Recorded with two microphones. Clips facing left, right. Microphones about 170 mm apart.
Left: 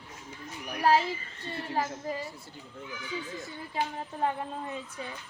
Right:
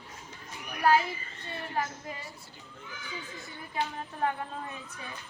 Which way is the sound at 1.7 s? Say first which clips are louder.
Left 4 dB; 35° left (ahead or behind).